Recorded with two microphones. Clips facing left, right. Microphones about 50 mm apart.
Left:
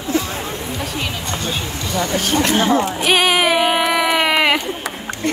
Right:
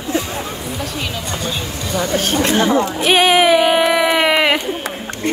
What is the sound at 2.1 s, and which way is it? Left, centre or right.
Speech, right.